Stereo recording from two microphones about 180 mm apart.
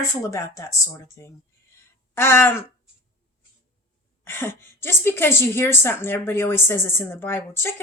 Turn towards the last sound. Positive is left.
turn(degrees=15)  # may be behind; listen again after turning